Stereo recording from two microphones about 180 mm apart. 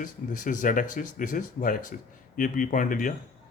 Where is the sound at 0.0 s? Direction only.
45° left (ahead or behind).